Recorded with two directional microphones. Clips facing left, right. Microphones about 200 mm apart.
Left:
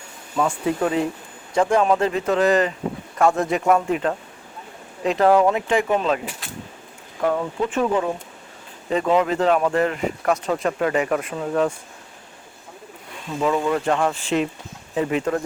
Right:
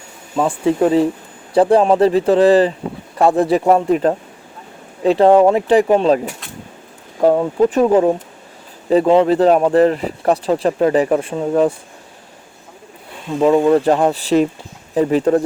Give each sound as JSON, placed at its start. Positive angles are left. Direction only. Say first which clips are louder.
{"t": 0.3, "sound": "speech", "louder": "right 6 dB", "side_deg": -30}
{"t": 13.4, "sound": "speech", "louder": "right 9 dB", "side_deg": -30}